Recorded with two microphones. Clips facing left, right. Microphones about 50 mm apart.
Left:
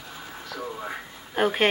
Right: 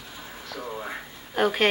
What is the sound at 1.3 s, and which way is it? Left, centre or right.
Speech, centre.